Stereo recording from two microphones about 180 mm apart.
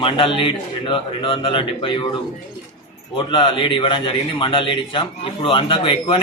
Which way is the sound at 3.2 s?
25° left (ahead or behind).